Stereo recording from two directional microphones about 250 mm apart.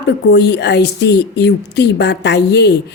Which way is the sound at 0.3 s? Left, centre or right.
Left.